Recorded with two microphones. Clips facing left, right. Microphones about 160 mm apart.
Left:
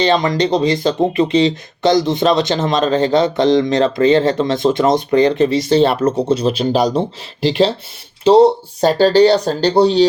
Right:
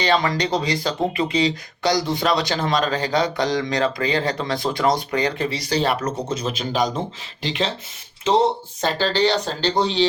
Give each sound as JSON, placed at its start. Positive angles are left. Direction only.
{"t": 0.0, "sound": "speech", "side_deg": 20}
{"t": 8.8, "sound": "speech", "side_deg": 40}